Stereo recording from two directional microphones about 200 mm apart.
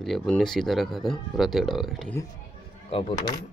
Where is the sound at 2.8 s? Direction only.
30° left (ahead or behind).